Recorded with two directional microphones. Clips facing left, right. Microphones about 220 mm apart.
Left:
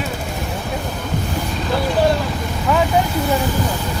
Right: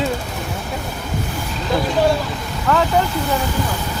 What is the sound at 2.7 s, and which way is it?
Speech, 10° left (ahead or behind).